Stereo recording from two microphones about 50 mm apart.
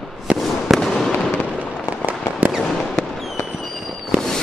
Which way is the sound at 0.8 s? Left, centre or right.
Centre.